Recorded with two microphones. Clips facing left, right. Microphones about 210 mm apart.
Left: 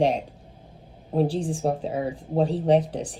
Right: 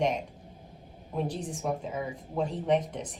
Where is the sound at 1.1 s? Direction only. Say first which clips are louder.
Left 9 dB; 30° left (ahead or behind).